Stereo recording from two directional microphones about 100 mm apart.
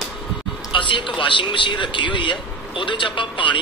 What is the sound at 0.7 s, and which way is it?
A man's voice, 55° left (ahead or behind).